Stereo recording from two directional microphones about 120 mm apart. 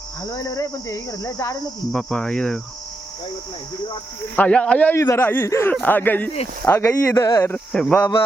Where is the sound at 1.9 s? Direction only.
5° left (ahead or behind).